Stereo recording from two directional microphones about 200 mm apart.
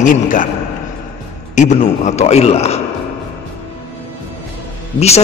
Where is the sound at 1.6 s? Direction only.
35° left (ahead or behind).